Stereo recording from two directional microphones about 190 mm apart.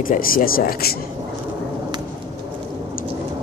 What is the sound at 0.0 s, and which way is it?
Speech, 50° left (ahead or behind).